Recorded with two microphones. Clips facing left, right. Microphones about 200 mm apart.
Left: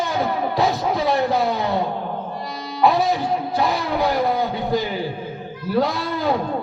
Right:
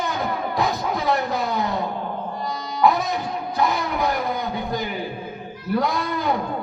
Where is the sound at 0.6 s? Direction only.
30° left (ahead or behind).